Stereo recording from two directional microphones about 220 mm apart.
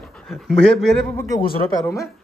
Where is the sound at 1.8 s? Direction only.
15° left (ahead or behind).